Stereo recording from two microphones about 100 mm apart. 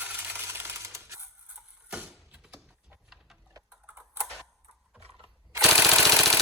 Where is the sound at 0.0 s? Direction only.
20° right (ahead or behind).